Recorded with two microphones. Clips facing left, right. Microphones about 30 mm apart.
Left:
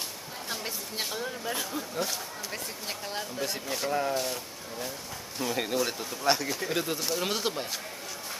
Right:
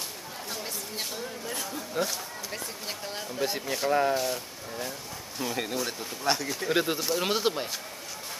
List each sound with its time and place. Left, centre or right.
0.5 s speech: centre
2.0 s speech: centre
3.3 s speech: centre
4.2 s speech: centre
6.7 s speech: centre